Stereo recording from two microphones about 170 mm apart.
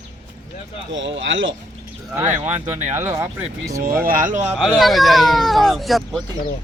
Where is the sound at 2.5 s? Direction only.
45° right (ahead or behind).